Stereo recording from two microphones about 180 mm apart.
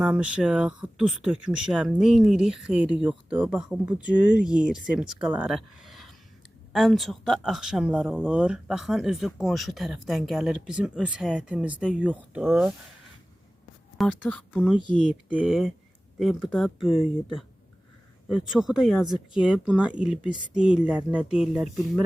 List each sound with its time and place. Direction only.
0.0 s speech: 5° right (ahead or behind)
14.0 s a woman's voice: 10° left (ahead or behind)
15.3 s speech: 5° right (ahead or behind)
16.9 s speech: 30° left (ahead or behind)
18.3 s speech: centre (ahead or behind)